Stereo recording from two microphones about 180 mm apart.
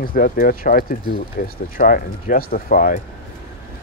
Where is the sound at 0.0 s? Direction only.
50° left (ahead or behind).